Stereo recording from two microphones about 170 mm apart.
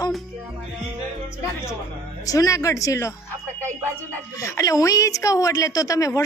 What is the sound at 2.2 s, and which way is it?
Speech, 20° left (ahead or behind).